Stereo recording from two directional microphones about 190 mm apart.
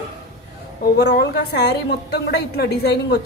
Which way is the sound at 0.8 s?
60° left (ahead or behind).